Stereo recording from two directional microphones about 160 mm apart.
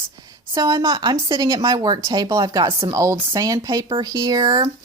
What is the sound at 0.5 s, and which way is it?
Speech, 20° right (ahead or behind).